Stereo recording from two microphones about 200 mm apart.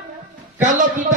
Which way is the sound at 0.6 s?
40° right (ahead or behind).